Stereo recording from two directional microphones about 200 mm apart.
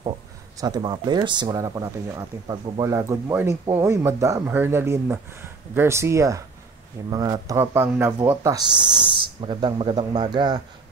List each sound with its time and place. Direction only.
0.6 s speech: 20° right (ahead or behind)